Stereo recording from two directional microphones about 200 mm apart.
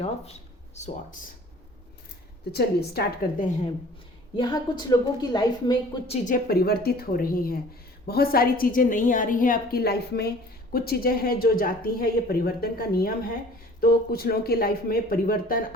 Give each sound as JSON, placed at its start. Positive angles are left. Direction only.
{"t": 2.5, "sound": "speech", "side_deg": 50}
{"t": 4.4, "sound": "a woman's voice", "side_deg": 20}
{"t": 6.2, "sound": "speech", "side_deg": 45}